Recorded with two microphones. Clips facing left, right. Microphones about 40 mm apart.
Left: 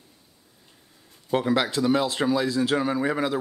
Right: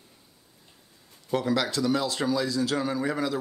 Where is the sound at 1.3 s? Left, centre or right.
Left.